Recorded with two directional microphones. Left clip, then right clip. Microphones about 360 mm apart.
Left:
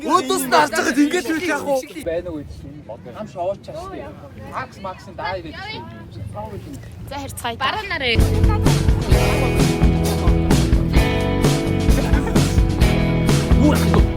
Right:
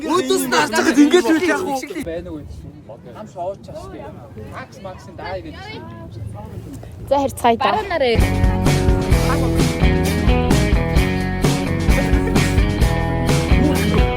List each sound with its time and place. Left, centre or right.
0.1 s speech: centre
0.5 s speech: centre
5.1 s speech: centre
7.1 s speech: right
8.2 s music: centre